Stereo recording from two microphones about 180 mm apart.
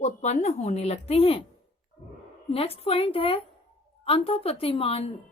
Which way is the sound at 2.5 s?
35° left (ahead or behind).